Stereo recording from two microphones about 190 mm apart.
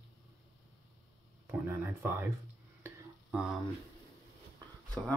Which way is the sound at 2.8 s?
5° right (ahead or behind).